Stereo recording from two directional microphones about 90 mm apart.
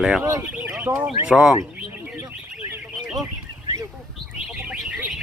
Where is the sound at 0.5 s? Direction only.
15° right (ahead or behind).